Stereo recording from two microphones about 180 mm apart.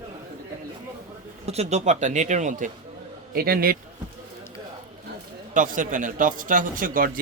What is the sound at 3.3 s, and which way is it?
Speech, 55° right (ahead or behind).